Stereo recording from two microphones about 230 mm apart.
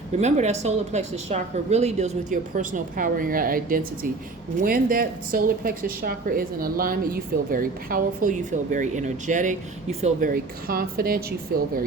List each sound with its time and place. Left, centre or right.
0.2 s speech: right